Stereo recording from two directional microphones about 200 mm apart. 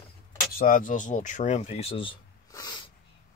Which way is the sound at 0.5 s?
45° left (ahead or behind).